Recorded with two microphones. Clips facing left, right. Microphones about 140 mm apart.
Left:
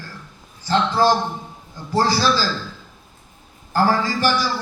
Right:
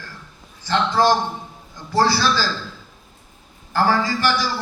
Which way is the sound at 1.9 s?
40° left (ahead or behind).